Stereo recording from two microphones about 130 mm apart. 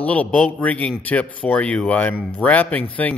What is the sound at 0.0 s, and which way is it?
Speech, 10° left (ahead or behind).